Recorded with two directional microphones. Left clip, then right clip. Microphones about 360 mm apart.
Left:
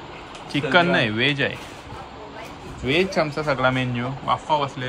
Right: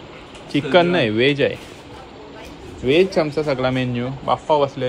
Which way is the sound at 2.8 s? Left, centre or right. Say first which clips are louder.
Right 5 dB; centre.